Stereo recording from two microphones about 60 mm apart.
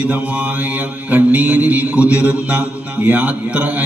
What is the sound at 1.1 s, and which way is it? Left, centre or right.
Mantra, right.